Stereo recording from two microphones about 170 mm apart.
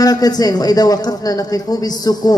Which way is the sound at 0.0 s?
20° left (ahead or behind).